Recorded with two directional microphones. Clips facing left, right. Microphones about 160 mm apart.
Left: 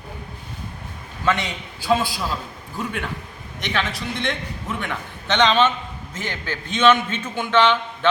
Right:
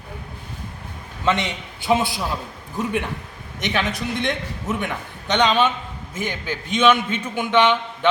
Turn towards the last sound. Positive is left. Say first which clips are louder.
# even
turn(degrees=-15)  # may be behind; listen again after turning